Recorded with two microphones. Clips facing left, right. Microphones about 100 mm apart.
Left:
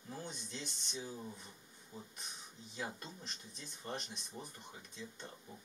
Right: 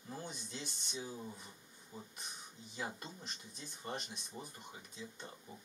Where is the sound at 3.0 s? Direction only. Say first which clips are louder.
Right 1 dB; 5° right (ahead or behind).